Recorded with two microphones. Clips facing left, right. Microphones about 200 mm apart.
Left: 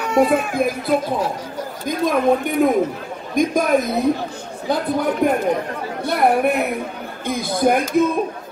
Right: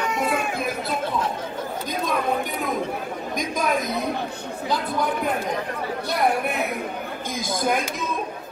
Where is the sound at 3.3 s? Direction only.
50° left (ahead or behind).